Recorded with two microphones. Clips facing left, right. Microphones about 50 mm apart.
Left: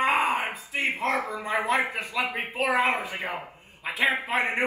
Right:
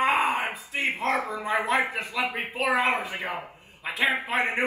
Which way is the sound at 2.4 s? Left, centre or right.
Left.